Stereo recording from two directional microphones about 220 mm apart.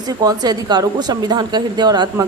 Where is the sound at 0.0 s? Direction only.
15° right (ahead or behind).